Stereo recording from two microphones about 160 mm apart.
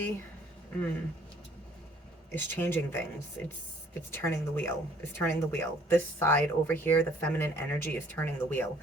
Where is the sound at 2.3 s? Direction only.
15° left (ahead or behind).